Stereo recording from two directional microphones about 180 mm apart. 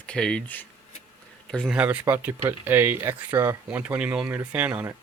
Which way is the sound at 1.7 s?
5° right (ahead or behind).